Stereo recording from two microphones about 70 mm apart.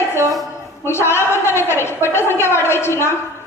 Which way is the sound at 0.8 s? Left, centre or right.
Left.